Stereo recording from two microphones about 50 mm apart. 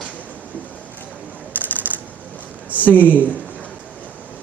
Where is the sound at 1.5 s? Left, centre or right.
Right.